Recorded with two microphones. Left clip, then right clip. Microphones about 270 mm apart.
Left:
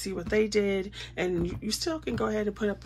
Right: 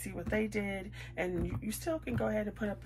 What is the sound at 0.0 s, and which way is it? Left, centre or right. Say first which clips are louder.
Speech: left 8 dB; centre.